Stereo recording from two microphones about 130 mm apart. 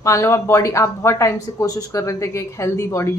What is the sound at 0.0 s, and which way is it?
Speech, 20° left (ahead or behind).